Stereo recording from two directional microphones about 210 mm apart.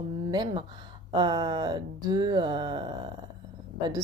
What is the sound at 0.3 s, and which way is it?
A woman's voice, 20° right (ahead or behind).